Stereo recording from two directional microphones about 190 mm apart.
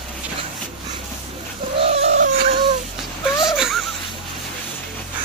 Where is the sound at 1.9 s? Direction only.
35° right (ahead or behind).